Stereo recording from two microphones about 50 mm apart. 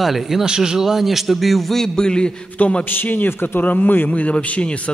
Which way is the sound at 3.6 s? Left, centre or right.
Left.